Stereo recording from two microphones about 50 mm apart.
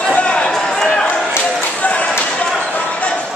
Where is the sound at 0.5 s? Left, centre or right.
Centre.